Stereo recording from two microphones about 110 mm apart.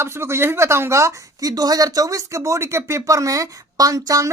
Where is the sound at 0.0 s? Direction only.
25° right (ahead or behind).